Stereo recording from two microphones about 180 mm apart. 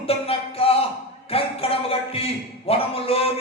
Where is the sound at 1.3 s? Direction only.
35° left (ahead or behind).